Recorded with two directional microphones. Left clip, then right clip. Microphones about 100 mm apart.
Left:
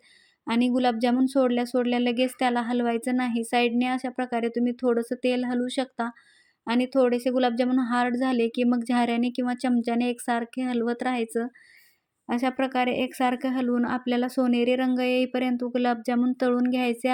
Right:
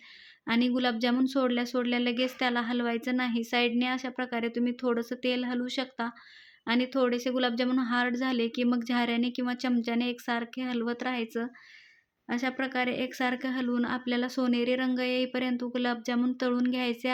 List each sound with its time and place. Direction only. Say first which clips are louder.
0.4 s a woman's voice: left 4 dB; 30° left (ahead or behind)